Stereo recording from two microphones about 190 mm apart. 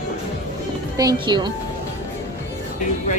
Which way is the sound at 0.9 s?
20° right (ahead or behind).